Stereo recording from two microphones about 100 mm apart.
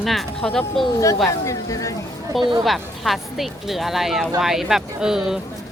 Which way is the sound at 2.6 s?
Centre (ahead or behind).